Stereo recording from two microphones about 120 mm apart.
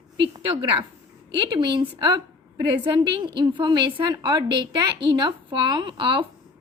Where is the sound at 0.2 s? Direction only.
45° right (ahead or behind).